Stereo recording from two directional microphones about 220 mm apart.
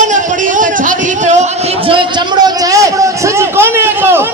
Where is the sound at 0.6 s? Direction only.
35° right (ahead or behind).